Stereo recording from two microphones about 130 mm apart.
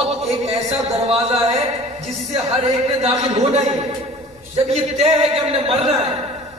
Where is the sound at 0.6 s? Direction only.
50° right (ahead or behind).